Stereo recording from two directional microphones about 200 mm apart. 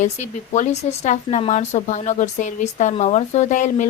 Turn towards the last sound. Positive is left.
turn(degrees=35)  # may be behind; listen again after turning